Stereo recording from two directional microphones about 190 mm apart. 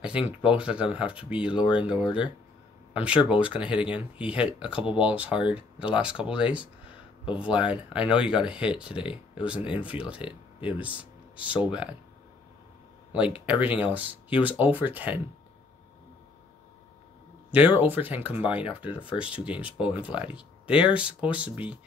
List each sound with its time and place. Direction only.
0.0 s speech: 5° right (ahead or behind)
1.6 s speech: 25° left (ahead or behind)
1.9 s speech: 5° right (ahead or behind)
13.1 s speech: 5° right (ahead or behind)
17.5 s speech: 10° right (ahead or behind)